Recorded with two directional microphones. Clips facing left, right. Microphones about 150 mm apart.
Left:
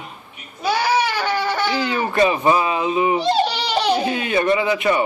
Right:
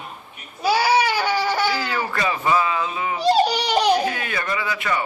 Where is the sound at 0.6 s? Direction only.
10° right (ahead or behind).